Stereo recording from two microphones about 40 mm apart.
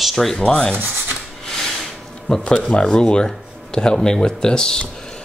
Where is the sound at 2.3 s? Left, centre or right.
Left.